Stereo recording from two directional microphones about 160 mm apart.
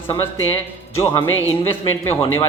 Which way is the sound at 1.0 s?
35° left (ahead or behind).